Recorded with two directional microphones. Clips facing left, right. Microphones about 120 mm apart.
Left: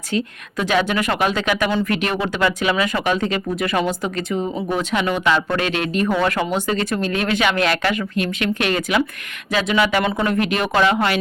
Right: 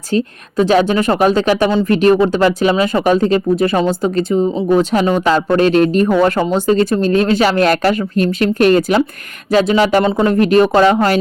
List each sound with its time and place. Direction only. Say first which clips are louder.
0.1 s speech: right 6 dB; 35° right (ahead or behind)